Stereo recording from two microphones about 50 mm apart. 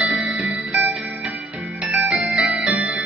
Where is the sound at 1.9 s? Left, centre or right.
Right.